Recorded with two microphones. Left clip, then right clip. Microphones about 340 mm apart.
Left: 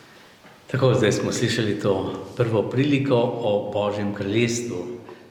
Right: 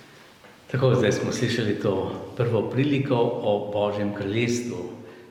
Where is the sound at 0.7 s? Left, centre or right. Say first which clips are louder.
Left 2 dB; left.